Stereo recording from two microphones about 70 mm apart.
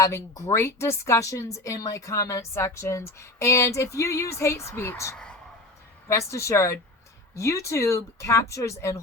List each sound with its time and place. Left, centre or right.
0.0 s a woman's voice: left
5.1 s a sound: centre
6.1 s a woman's voice: left